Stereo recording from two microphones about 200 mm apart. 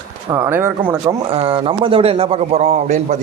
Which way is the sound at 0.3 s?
15° right (ahead or behind).